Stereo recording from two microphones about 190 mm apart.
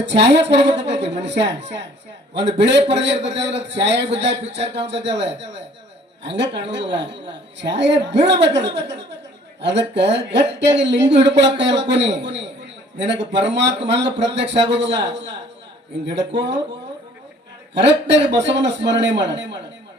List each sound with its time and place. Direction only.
0.0 s speech: 65° right (ahead or behind)
17.7 s speech: 65° right (ahead or behind)